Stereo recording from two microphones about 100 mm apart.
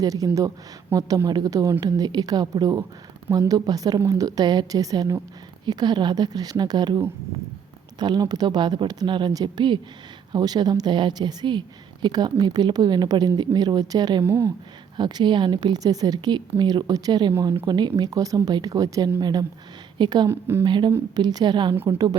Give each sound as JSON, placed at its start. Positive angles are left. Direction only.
{"t": 0.0, "sound": "a woman's voice", "side_deg": -35}
{"t": 14.3, "sound": "a woman's voice", "side_deg": -30}
{"t": 14.9, "sound": "a woman's voice", "side_deg": -50}
{"t": 20.2, "sound": "a woman's voice", "side_deg": -25}
{"t": 20.7, "sound": "a woman's voice", "side_deg": -50}